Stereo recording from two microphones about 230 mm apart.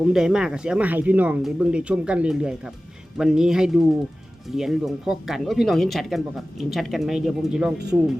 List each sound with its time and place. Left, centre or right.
0.0 s speech: centre